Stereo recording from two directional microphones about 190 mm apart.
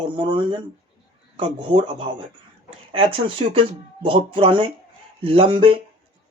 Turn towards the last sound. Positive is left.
turn(degrees=-30)  # may be behind; listen again after turning